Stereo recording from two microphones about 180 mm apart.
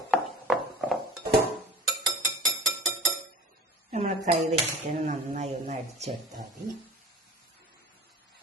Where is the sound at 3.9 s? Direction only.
40° right (ahead or behind).